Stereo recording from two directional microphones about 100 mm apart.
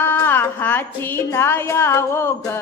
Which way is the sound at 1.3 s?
25° left (ahead or behind).